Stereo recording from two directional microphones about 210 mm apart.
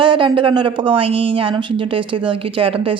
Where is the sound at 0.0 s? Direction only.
25° right (ahead or behind).